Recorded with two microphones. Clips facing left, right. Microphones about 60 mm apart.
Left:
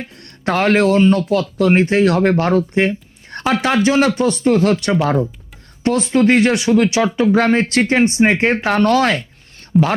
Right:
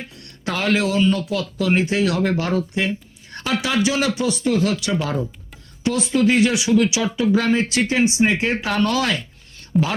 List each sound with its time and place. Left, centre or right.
0.2 s speech: left